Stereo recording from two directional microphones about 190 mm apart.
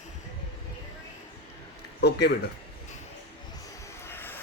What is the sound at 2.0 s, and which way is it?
Speech, 60° left (ahead or behind).